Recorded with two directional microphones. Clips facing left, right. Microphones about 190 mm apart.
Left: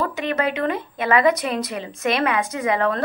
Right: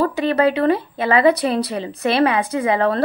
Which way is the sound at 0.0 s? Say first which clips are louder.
Right 6 dB; 35° right (ahead or behind).